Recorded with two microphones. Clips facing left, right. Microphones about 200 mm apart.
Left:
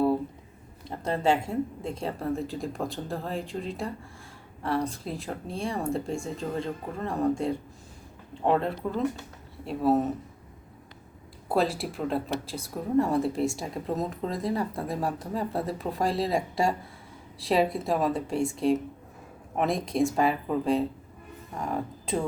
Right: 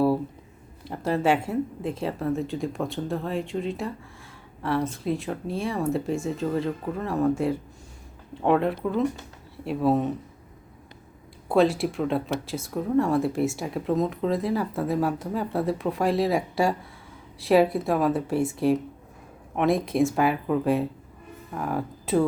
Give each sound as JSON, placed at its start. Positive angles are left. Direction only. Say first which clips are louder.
{"t": 1.1, "sound": "speech", "louder": "right 2 dB", "side_deg": 25}
{"t": 1.8, "sound": "speech", "louder": "right 4 dB", "side_deg": 0}
{"t": 9.6, "sound": "speech", "louder": "right 1 dB", "side_deg": 0}
{"t": 11.4, "sound": "speech", "louder": "right 6 dB", "side_deg": 0}